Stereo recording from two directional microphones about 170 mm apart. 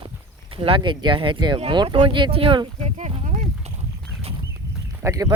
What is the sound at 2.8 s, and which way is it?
Speech, 40° right (ahead or behind).